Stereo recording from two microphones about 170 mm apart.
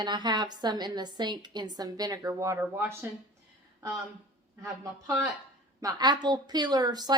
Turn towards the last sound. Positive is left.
turn(degrees=-25)  # may be behind; listen again after turning